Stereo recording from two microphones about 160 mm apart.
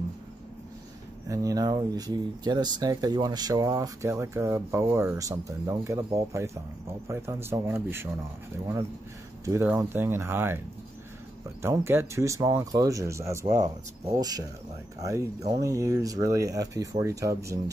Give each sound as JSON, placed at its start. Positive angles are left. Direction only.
{"t": 1.3, "sound": "speech", "side_deg": -20}
{"t": 9.4, "sound": "speech", "side_deg": -15}
{"t": 11.6, "sound": "speech", "side_deg": -15}
{"t": 15.5, "sound": "speech", "side_deg": -20}